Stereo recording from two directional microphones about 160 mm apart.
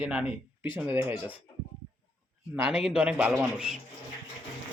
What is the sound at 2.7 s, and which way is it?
A man's voice, 5° right (ahead or behind).